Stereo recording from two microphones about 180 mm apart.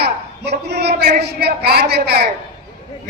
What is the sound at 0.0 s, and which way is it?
A man's voice, 65° right (ahead or behind).